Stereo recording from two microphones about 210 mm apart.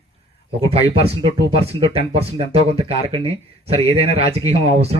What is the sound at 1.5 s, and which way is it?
Speech, 30° right (ahead or behind).